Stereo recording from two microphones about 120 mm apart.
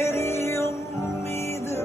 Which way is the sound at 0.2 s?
20° left (ahead or behind).